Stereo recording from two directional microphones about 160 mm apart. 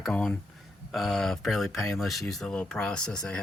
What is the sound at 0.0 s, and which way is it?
Speech, 5° left (ahead or behind).